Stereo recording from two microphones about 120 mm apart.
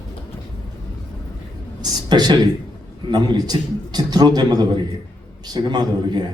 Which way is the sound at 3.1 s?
35° right (ahead or behind).